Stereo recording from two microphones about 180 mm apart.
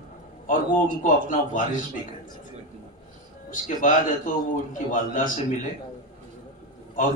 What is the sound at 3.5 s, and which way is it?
Speech, 45° left (ahead or behind).